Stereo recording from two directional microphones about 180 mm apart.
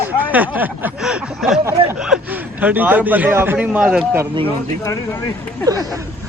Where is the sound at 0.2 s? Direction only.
10° right (ahead or behind).